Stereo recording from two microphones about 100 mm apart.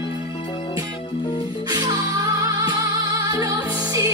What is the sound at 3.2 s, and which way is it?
Music, 35° right (ahead or behind).